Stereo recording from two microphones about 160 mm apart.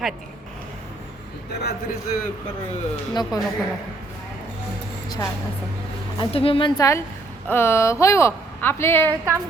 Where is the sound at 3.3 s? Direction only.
25° left (ahead or behind).